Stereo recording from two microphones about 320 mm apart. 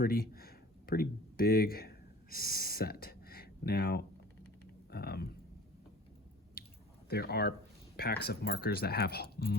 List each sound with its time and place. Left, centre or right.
0.0 s speech: left
4.9 s a sound: left
6.6 s squish: left
7.1 s speech: left